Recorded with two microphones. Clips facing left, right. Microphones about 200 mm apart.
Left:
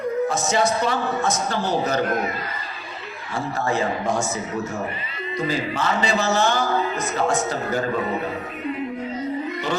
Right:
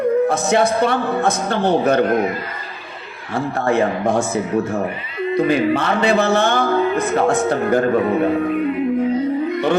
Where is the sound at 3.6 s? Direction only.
55° right (ahead or behind).